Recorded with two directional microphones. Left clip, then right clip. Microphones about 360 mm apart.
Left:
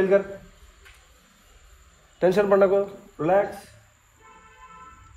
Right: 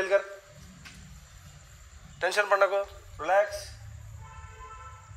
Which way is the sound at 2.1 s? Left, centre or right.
Right.